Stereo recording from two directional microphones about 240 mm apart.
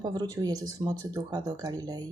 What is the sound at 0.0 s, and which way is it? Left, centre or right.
Speech, centre.